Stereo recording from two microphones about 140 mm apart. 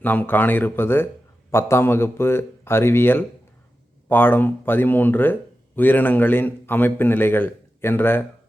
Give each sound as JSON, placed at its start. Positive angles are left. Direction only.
{"t": 0.0, "sound": "speech", "side_deg": 15}